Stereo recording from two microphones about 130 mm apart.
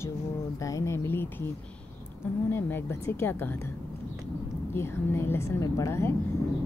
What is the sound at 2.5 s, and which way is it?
A woman's voice, 15° left (ahead or behind).